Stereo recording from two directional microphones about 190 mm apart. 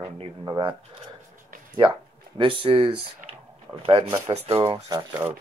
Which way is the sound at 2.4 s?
25° right (ahead or behind).